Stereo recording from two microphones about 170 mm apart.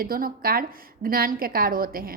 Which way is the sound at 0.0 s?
60° right (ahead or behind).